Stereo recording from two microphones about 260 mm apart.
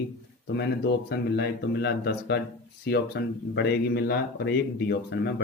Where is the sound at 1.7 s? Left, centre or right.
Left.